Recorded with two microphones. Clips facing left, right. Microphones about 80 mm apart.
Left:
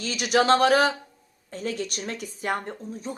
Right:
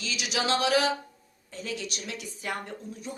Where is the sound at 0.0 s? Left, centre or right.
Left.